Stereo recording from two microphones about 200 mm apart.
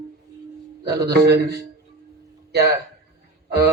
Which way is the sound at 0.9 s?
55° right (ahead or behind).